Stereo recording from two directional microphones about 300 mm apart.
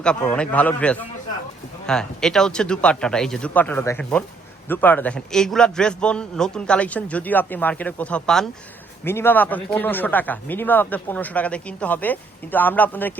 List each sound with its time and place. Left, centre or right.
0.0 s speech: centre